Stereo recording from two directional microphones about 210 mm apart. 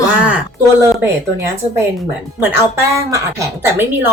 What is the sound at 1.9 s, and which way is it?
Speech, 10° right (ahead or behind).